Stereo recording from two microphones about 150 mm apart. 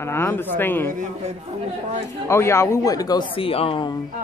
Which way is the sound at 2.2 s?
15° left (ahead or behind).